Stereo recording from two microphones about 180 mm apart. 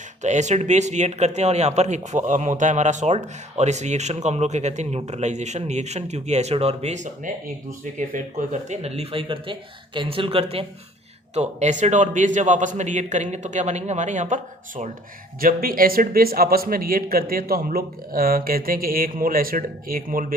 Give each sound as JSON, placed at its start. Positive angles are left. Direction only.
{"t": 0.2, "sound": "a man's voice", "side_deg": -40}